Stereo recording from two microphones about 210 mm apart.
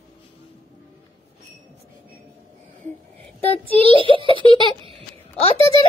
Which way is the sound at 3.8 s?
25° right (ahead or behind).